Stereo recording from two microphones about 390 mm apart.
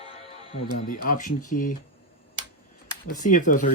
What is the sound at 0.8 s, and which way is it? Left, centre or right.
Speech, left.